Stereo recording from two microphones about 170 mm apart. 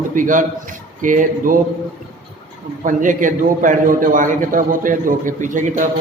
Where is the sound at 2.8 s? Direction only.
50° right (ahead or behind).